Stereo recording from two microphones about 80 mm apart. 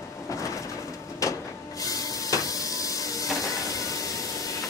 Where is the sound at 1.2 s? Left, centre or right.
Left.